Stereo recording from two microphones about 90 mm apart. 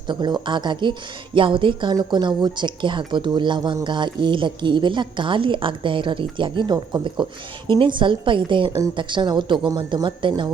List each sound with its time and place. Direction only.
0.1 s a woman's voice: 55° right (ahead or behind)